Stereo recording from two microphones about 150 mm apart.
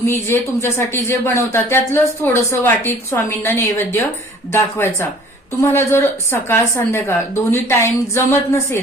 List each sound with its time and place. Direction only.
0.0 s speech: 15° left (ahead or behind)